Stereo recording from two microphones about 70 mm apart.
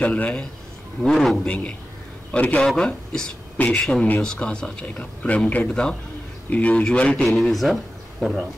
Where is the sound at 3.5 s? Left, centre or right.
Left.